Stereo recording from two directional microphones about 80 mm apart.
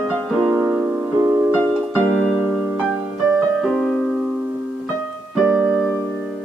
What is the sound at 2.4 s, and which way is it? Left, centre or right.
Music, centre.